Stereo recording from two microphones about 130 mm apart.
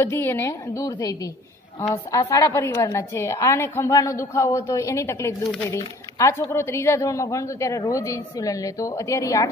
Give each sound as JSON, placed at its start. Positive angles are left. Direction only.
{"t": 0.0, "sound": "a woman's voice", "side_deg": 20}